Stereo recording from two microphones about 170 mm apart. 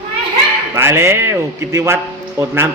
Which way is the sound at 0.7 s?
15° right (ahead or behind).